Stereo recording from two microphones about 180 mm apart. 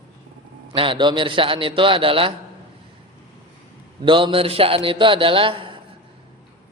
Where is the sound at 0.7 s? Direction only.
30° right (ahead or behind).